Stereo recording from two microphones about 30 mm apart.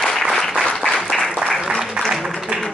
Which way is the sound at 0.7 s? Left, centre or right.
Left.